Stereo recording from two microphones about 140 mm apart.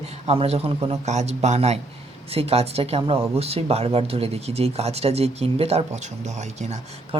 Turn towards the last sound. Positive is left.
turn(degrees=-40)  # may be behind; listen again after turning